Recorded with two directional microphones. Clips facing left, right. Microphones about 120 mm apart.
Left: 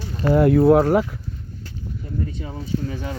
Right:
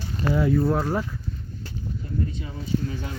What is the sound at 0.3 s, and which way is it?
Speech, 65° left (ahead or behind).